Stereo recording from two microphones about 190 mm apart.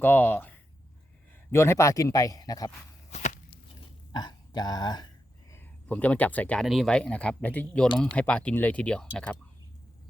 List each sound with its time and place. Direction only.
0.0 s speech: 10° left (ahead or behind)
3.1 s walk: 40° left (ahead or behind)
4.1 s speech: 20° left (ahead or behind)
5.5 s speech: 10° left (ahead or behind)